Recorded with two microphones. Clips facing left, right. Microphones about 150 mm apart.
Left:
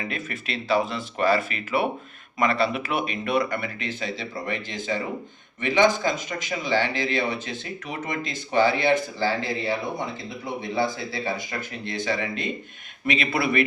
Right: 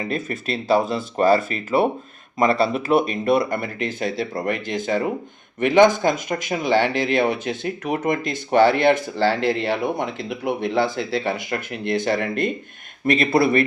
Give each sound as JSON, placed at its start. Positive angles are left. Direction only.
{"t": 0.0, "sound": "speech", "side_deg": -35}
{"t": 13.1, "sound": "speech", "side_deg": -40}